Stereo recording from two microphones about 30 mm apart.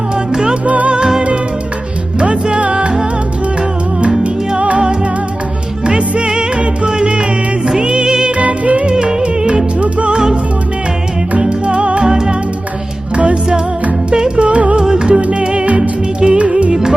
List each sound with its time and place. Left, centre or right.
0.6 s music: right
2.1 s music: right
5.8 s music: right
8.0 s music: right
8.4 s music: right
10.1 s music: right
11.3 s music: right
12.0 s music: right
13.1 s music: right
14.8 s music: right
15.8 s music: right
16.4 s music: right